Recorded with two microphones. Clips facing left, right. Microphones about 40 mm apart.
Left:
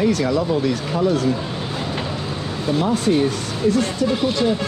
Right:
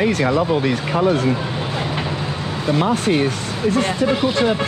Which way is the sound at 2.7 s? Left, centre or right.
Right.